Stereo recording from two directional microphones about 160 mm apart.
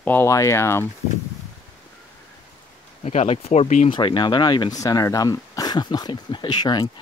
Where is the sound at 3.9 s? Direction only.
30° left (ahead or behind).